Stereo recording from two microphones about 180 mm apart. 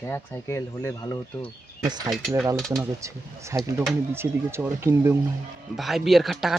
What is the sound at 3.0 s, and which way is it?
Speech, 15° right (ahead or behind).